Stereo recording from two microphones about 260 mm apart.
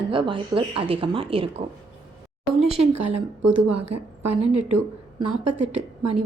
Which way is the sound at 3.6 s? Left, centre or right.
Right.